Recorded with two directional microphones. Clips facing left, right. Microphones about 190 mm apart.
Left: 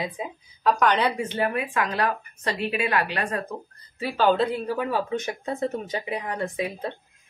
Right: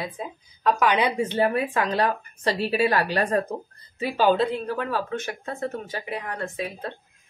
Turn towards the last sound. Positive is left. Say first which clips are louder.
# left 2 dB
turn(degrees=15)  # may be behind; listen again after turning